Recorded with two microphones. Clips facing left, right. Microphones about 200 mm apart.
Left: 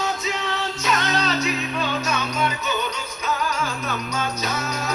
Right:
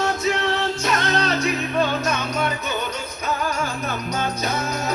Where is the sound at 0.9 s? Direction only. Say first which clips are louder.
Even; 55° right (ahead or behind).